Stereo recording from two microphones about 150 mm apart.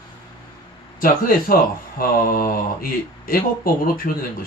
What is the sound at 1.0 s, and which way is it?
Speech, 70° left (ahead or behind).